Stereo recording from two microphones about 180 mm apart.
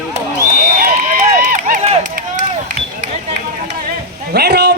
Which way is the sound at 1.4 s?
50° right (ahead or behind).